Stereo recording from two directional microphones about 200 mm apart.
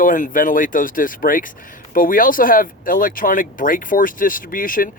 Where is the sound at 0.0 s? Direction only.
45° left (ahead or behind).